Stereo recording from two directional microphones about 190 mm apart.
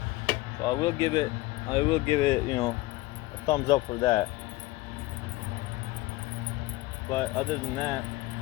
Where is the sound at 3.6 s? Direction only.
30° left (ahead or behind).